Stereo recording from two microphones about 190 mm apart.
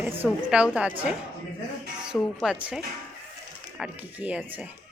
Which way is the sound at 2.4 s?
Centre (ahead or behind).